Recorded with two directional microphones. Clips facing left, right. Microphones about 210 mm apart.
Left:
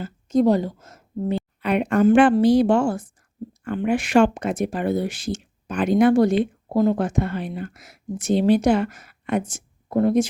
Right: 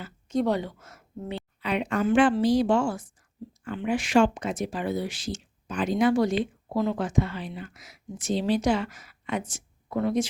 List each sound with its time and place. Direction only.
0.0 s speech: 40° left (ahead or behind)
1.6 s speech: 55° left (ahead or behind)
6.7 s speech: 45° left (ahead or behind)